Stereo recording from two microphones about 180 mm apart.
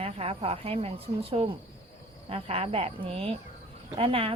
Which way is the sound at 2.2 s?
30° right (ahead or behind).